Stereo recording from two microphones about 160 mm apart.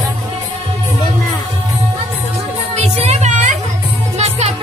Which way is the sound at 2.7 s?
40° right (ahead or behind).